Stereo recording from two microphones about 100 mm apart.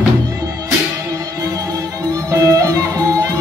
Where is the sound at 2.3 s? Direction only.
30° right (ahead or behind).